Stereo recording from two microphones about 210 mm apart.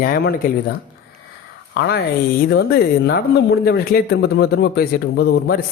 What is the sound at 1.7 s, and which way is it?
Speech, 50° left (ahead or behind).